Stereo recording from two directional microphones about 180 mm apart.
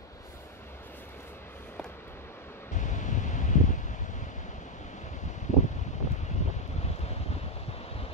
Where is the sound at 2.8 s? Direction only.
40° left (ahead or behind).